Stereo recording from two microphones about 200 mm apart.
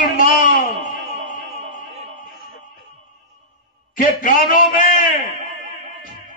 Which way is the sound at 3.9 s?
45° left (ahead or behind).